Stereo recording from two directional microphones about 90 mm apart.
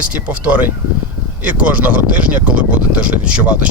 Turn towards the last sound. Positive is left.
turn(degrees=-15)  # may be behind; listen again after turning